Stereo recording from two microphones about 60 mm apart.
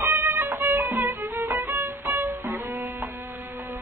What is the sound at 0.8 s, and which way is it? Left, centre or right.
Music, right.